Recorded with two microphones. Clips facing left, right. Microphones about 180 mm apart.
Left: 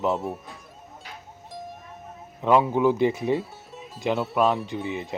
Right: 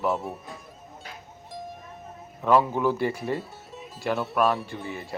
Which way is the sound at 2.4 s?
15° left (ahead or behind).